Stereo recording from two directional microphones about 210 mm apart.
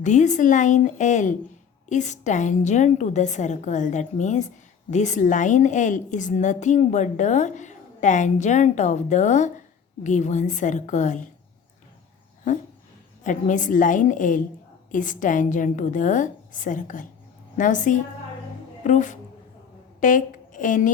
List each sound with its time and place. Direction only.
0.0 s a woman's voice: 35° left (ahead or behind)
13.2 s a woman's voice: 35° left (ahead or behind)